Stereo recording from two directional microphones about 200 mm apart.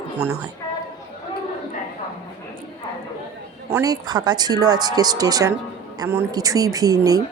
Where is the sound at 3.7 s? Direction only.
20° right (ahead or behind).